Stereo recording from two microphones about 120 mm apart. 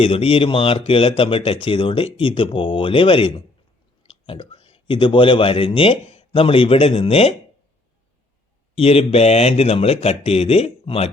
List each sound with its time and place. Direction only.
0.0 s speech: 50° left (ahead or behind)
8.7 s a man's voice: 55° left (ahead or behind)